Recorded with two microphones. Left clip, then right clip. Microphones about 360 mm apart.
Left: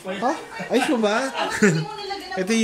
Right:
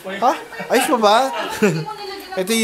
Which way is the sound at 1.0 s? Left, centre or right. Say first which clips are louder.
Right 7 dB; centre.